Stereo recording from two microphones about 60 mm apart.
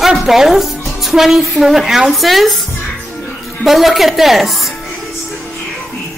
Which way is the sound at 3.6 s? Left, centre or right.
Centre.